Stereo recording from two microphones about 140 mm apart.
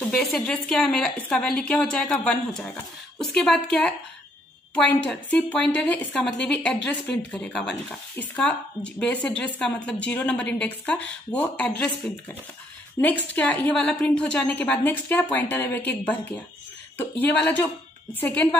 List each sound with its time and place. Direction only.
0.0 s a woman's voice: 5° left (ahead or behind)